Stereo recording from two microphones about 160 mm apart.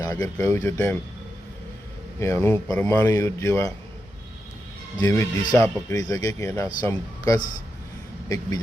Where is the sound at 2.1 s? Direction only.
15° left (ahead or behind).